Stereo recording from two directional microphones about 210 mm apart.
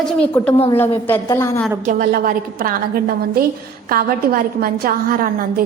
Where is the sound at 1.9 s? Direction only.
40° right (ahead or behind).